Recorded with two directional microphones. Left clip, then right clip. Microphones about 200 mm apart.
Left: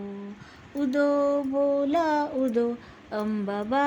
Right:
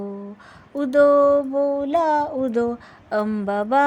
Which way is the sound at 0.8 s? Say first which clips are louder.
Right 9 dB; 45° right (ahead or behind).